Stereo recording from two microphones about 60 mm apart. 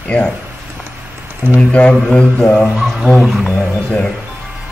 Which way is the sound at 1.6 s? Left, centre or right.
Centre.